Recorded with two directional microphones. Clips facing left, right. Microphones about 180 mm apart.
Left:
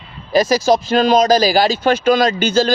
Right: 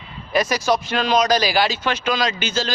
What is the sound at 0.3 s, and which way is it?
Speech, 35° left (ahead or behind).